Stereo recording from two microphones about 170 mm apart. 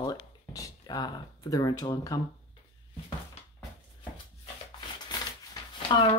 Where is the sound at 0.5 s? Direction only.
20° left (ahead or behind).